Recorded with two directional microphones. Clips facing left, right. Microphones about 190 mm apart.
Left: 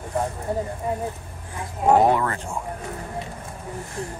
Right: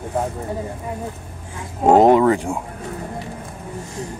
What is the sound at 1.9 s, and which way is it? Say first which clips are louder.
Speech: right 6 dB; 20° right (ahead or behind).